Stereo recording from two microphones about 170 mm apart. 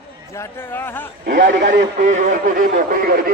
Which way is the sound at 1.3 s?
50° right (ahead or behind).